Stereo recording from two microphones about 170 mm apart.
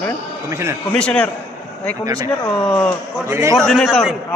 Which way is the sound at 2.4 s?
10° left (ahead or behind).